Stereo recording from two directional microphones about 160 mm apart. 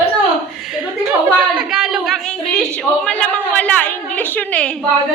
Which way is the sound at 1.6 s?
5° right (ahead or behind).